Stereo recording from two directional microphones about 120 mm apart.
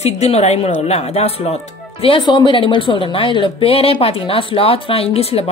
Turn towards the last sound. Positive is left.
turn(degrees=55)  # may be behind; listen again after turning